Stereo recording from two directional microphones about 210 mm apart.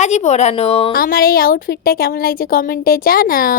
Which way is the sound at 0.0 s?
30° left (ahead or behind).